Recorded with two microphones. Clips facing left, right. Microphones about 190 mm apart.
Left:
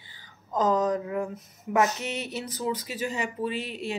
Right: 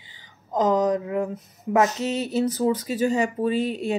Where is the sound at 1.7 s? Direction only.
35° right (ahead or behind).